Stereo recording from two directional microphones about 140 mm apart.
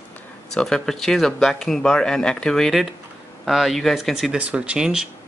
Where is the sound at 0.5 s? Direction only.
5° left (ahead or behind).